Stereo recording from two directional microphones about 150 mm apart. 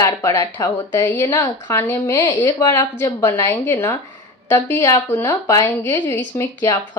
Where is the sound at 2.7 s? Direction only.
20° left (ahead or behind).